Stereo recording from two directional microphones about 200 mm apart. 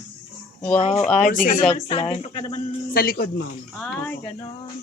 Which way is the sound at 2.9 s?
45° left (ahead or behind).